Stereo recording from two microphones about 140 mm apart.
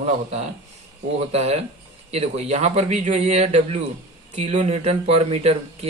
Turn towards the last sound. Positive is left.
turn(degrees=-50)  # may be behind; listen again after turning